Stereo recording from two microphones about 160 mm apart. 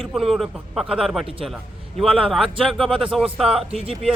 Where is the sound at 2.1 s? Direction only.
35° right (ahead or behind).